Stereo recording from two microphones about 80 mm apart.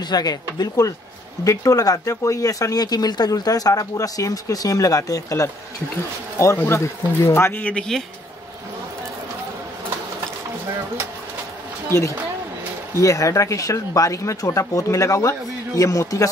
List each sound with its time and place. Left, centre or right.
0.0 s speech: left
6.3 s speech: left
7.7 s a man's voice: centre
12.9 s speech: left